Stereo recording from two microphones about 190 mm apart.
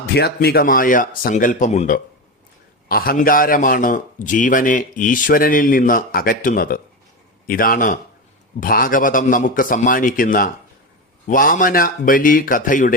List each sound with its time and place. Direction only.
0.2 s a man's voice: 55° left (ahead or behind); by 2.0 s 40° left (ahead or behind)
2.9 s a man's voice: 50° left (ahead or behind)